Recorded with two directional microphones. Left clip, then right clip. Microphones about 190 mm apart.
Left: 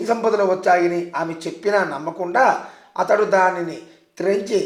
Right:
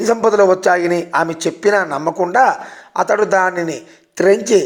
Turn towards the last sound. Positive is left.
turn(degrees=-40)  # may be behind; listen again after turning